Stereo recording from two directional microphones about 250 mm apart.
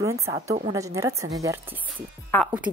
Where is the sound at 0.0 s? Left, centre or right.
Centre.